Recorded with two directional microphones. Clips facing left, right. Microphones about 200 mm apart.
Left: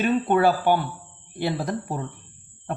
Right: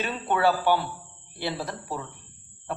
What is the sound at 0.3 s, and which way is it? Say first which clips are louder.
Speech: even; 50° left (ahead or behind).